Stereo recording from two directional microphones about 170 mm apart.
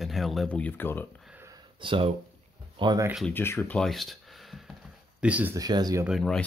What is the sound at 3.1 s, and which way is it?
Speech, 10° left (ahead or behind).